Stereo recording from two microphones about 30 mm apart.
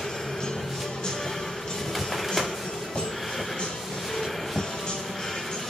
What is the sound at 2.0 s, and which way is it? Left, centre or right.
Printer, centre.